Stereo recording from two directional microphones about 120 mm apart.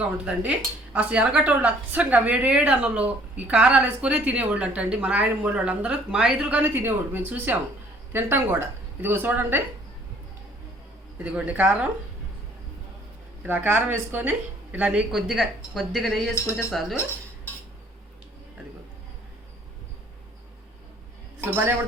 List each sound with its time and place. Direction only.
0.3 s speech: 10° right (ahead or behind)
11.2 s speech: 10° right (ahead or behind)
13.4 s speech: 15° right (ahead or behind)
16.3 s speech: 25° left (ahead or behind)
21.4 s speech: 15° right (ahead or behind)